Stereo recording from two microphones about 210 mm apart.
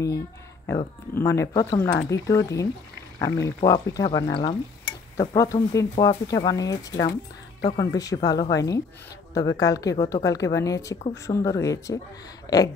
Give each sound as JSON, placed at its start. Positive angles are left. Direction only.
{"t": 0.7, "sound": "speech", "side_deg": 15}